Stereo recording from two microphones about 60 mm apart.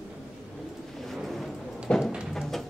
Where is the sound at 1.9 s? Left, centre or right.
Left.